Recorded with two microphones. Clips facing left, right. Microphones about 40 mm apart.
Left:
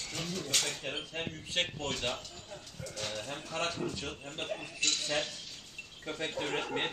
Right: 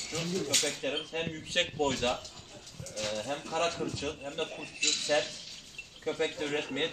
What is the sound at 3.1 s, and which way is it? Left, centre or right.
Speech, right.